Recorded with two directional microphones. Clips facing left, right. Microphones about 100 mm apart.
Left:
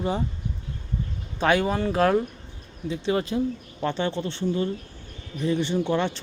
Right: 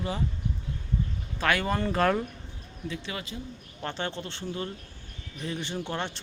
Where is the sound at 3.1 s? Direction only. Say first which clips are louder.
Left 12 dB; 30° left (ahead or behind).